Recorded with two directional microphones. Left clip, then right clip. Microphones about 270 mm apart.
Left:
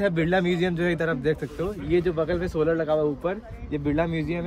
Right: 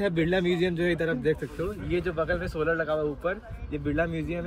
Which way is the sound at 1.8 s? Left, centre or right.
Left.